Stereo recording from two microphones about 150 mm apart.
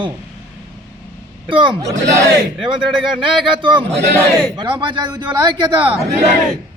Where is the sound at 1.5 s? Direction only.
35° right (ahead or behind).